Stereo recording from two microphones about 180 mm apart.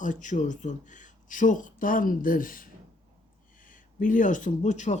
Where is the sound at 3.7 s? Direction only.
45° left (ahead or behind).